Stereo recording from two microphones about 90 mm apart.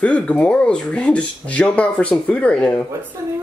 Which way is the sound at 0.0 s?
15° left (ahead or behind).